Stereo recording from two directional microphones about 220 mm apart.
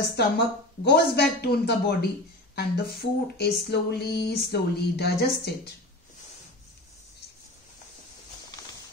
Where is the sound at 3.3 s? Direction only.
45° left (ahead or behind).